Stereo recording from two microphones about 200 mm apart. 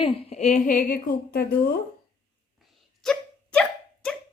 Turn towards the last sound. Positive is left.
turn(degrees=5)  # may be behind; listen again after turning